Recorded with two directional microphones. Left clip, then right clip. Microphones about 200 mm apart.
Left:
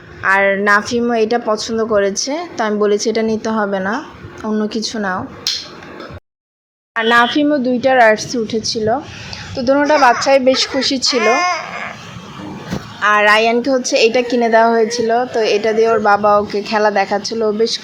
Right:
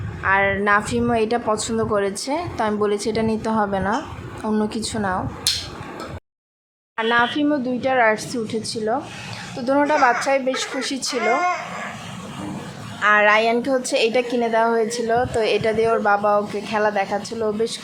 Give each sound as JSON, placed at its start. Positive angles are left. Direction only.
{"t": 0.2, "sound": "a woman's voice", "side_deg": 15}
{"t": 6.9, "sound": "speech", "side_deg": 30}
{"t": 7.3, "sound": "a woman's voice", "side_deg": 15}
{"t": 13.0, "sound": "a woman's voice", "side_deg": 10}